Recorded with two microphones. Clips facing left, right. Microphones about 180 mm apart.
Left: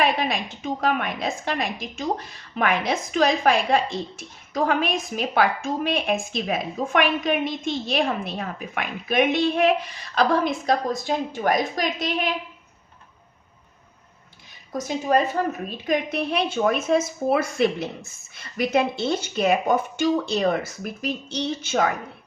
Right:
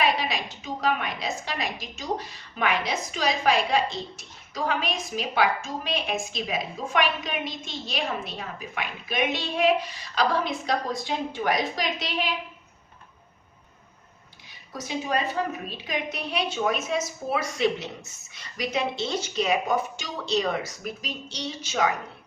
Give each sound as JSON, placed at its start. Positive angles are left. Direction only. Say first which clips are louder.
{"t": 0.0, "sound": "a woman's voice", "louder": "left 3 dB", "side_deg": 50}
{"t": 14.7, "sound": "a woman's voice", "louder": "left 7 dB", "side_deg": 45}